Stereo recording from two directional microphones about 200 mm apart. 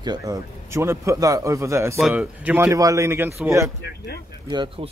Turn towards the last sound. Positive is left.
turn(degrees=-25)  # may be behind; listen again after turning